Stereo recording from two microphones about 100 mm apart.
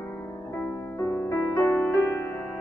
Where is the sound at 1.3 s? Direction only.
25° left (ahead or behind).